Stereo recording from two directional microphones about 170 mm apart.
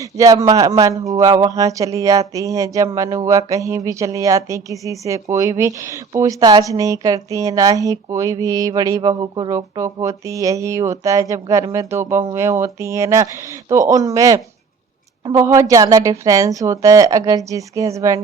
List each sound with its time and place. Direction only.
0.0 s speech: 20° right (ahead or behind)